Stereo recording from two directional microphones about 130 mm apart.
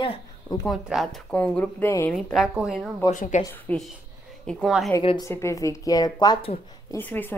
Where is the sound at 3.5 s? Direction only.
10° left (ahead or behind).